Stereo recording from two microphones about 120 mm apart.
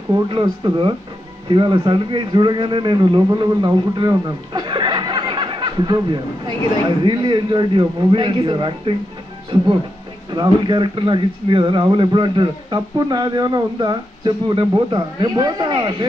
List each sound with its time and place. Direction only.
0.3 s a man's voice: 45° right (ahead or behind)